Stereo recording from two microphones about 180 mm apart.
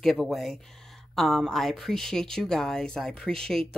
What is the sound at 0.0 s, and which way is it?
Speech, centre (ahead or behind).